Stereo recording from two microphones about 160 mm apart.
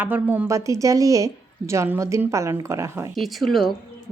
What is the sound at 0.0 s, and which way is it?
A woman's voice, 10° right (ahead or behind).